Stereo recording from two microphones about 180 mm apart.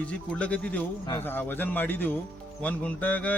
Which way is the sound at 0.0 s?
5° left (ahead or behind).